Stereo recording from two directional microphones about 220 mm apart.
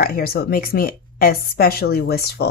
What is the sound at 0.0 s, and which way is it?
Speech, 40° left (ahead or behind).